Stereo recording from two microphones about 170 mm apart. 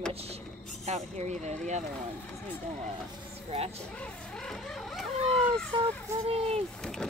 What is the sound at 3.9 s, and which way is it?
Vehicle, 5° left (ahead or behind).